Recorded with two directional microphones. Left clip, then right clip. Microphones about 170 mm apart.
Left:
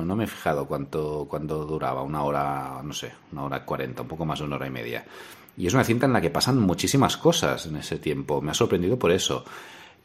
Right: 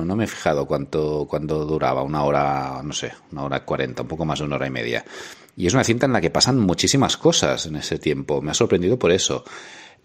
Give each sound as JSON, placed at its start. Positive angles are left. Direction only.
{"t": 0.0, "sound": "speech", "side_deg": -25}